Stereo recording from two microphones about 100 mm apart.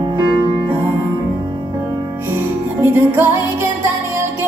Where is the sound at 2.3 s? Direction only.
20° right (ahead or behind).